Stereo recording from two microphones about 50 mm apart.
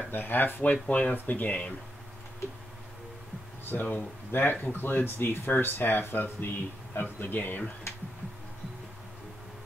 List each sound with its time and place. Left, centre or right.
0.1 s speech: left
0.8 s speech: left
1.1 s speech: left
3.7 s speech: left